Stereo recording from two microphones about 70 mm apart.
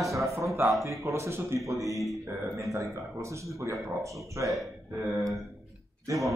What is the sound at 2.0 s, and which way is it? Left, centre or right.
Speech, centre.